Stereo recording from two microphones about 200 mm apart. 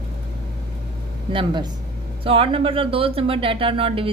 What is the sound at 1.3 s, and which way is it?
Speech, 25° right (ahead or behind).